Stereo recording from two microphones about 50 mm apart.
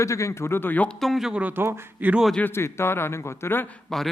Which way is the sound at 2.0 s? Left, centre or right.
Right.